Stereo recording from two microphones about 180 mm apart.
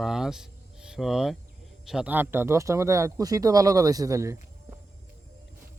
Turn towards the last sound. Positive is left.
turn(degrees=-15)  # may be behind; listen again after turning